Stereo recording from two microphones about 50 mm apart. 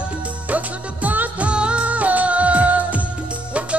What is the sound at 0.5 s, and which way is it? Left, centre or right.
Music, right.